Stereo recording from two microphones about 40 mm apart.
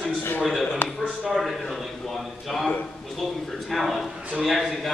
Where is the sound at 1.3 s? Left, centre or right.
Centre.